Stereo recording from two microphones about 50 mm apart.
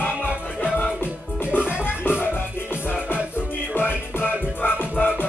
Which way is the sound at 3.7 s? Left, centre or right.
Left.